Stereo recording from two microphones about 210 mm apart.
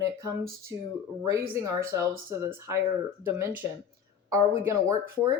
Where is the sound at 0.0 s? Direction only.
15° right (ahead or behind).